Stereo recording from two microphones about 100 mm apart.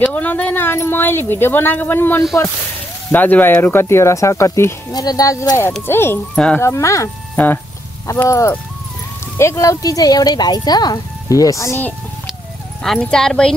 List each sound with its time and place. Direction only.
0.1 s speech: 15° left (ahead or behind)
4.9 s speech: 40° left (ahead or behind)
5.9 s speech: 25° left (ahead or behind)
6.3 s speech: 10° left (ahead or behind)
6.6 s speech: 30° left (ahead or behind)
7.3 s speech: 20° left (ahead or behind)
8.3 s speech: 30° left (ahead or behind)
13.0 s speech: 5° left (ahead or behind)